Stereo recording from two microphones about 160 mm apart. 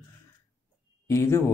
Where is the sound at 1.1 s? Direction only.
15° left (ahead or behind).